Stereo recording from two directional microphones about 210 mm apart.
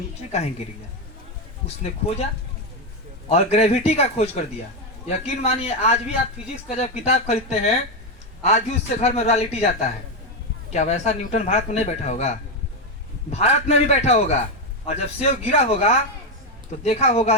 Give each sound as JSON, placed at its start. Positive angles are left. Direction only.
{"t": 0.3, "sound": "speech", "side_deg": 30}
{"t": 1.6, "sound": "speech", "side_deg": 30}
{"t": 3.2, "sound": "speech", "side_deg": 30}